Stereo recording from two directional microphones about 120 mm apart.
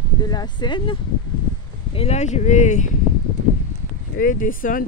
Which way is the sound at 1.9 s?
60° left (ahead or behind).